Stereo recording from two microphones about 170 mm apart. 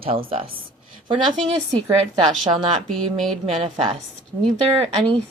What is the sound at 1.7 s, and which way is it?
Speech, 25° right (ahead or behind).